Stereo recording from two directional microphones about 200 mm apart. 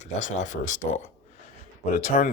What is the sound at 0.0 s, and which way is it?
Speech, 35° left (ahead or behind).